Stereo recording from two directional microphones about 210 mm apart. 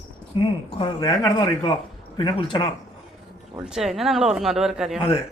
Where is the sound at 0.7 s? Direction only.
25° left (ahead or behind).